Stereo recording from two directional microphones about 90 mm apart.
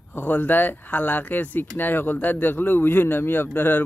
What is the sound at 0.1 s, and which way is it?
A man's voice, 20° left (ahead or behind).